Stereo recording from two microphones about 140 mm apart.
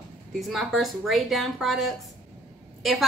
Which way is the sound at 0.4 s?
Centre (ahead or behind).